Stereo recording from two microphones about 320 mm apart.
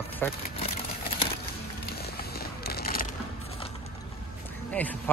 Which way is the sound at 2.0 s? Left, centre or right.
Left.